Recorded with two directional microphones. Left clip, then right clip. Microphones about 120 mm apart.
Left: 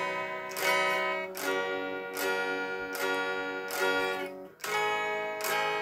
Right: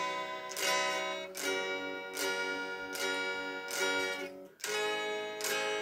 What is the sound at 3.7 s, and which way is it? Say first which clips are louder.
Music: left 4 dB; 35° right (ahead or behind).